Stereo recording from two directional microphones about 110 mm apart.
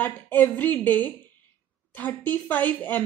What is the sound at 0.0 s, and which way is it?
Speech, 20° left (ahead or behind).